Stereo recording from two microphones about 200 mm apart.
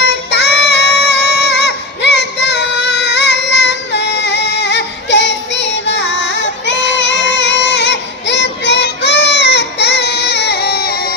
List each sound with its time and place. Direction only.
0.3 s child singing: 55° left (ahead or behind)